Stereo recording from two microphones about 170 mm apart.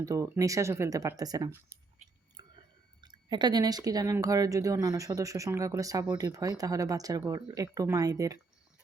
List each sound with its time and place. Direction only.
0.0 s speech: 20° right (ahead or behind)
2.4 s chewing: 20° right (ahead or behind)
3.0 s speech: 25° right (ahead or behind)